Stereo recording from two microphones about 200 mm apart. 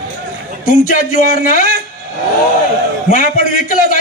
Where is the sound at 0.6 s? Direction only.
40° left (ahead or behind).